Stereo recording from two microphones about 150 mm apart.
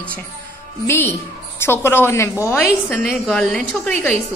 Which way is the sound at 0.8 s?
15° left (ahead or behind).